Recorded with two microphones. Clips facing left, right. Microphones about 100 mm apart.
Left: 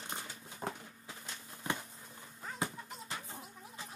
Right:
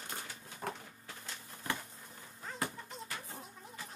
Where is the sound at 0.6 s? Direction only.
15° left (ahead or behind).